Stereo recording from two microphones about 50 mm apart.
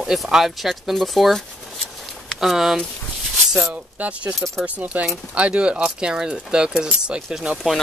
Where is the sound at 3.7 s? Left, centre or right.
Right.